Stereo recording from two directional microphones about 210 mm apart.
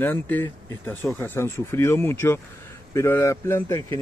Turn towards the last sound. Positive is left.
turn(degrees=15)  # may be behind; listen again after turning